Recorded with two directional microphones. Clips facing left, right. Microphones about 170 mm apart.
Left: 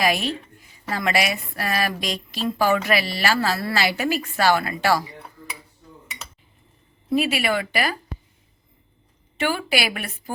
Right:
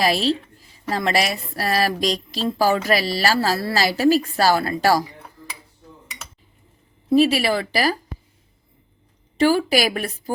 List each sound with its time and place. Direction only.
0.0 s a woman's voice: 35° right (ahead or behind)
7.2 s a woman's voice: 35° right (ahead or behind)
9.4 s a woman's voice: 35° right (ahead or behind)